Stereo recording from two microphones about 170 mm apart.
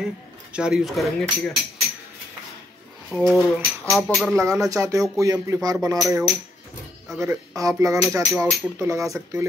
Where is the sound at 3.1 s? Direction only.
5° left (ahead or behind).